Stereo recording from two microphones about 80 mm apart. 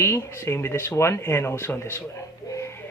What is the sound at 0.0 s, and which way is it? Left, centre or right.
Speech, left.